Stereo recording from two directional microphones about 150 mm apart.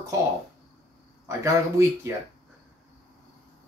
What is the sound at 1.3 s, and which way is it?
Speech, 20° right (ahead or behind).